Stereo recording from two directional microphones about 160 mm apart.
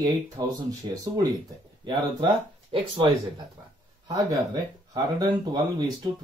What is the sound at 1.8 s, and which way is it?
A man's voice, 30° right (ahead or behind).